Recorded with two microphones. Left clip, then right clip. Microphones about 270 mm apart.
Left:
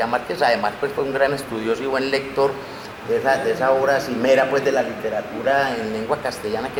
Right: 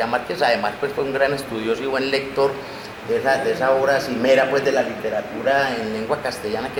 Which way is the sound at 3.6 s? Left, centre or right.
Centre.